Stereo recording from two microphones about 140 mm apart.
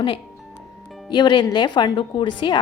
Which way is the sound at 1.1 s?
30° left (ahead or behind).